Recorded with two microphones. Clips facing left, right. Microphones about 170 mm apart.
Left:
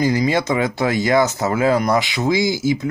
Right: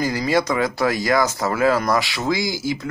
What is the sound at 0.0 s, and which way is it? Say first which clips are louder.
Speech: left 2 dB; 20° left (ahead or behind).